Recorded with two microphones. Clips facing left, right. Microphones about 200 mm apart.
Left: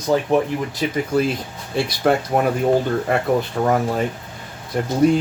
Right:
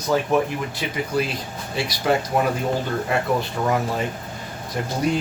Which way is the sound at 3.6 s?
50° left (ahead or behind).